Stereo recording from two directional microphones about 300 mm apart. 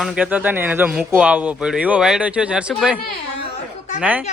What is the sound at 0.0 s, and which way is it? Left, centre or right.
A man's voice, centre.